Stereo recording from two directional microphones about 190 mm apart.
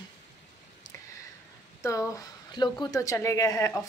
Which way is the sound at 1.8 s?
15° left (ahead or behind).